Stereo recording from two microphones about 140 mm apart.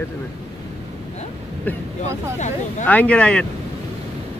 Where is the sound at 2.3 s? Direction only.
60° left (ahead or behind).